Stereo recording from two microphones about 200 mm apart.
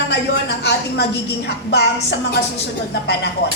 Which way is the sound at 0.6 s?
55° left (ahead or behind).